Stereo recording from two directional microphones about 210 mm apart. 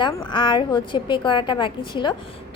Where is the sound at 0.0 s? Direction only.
20° left (ahead or behind).